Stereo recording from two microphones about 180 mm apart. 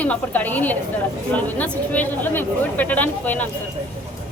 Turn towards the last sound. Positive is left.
turn(degrees=10)  # may be behind; listen again after turning